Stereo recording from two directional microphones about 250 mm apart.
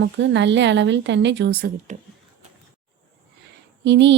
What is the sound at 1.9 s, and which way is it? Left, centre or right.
Speech, right.